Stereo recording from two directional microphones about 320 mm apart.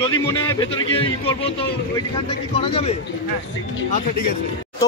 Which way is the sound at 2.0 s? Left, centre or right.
Centre.